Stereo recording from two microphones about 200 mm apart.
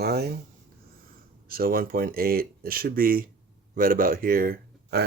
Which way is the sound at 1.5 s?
45° right (ahead or behind).